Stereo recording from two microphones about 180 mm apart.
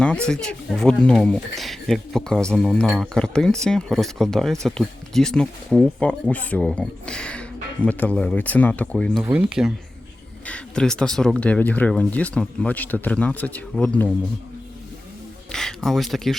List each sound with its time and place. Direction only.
0.0 s speech: 5° left (ahead or behind)
9.2 s speech: 10° right (ahead or behind); by 14.1 s 10° left (ahead or behind)
15.5 s speech: centre (ahead or behind)